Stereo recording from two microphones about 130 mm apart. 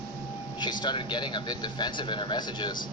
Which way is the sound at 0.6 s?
35° left (ahead or behind).